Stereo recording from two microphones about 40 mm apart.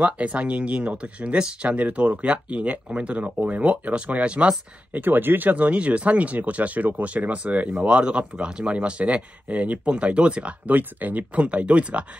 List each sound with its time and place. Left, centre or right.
0.0 s speech: right
1.4 s speech: right
1.8 s speech: right
4.9 s speech: right
10.7 s speech: right